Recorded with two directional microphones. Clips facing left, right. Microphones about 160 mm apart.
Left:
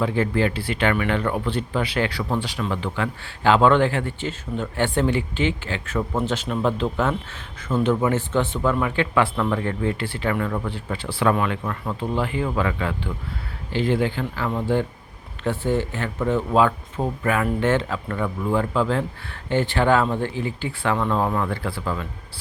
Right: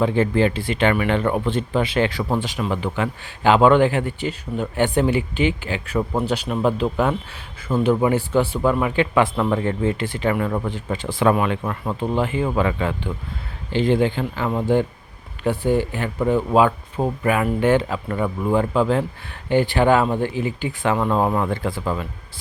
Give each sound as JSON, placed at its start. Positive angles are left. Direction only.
{"t": 0.0, "sound": "speech", "side_deg": -25}